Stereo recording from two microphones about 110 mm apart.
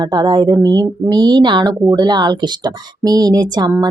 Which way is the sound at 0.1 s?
40° right (ahead or behind).